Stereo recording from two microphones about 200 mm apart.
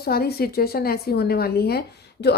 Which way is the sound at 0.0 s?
50° left (ahead or behind).